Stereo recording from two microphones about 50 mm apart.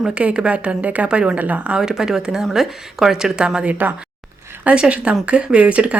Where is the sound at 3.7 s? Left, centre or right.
Right.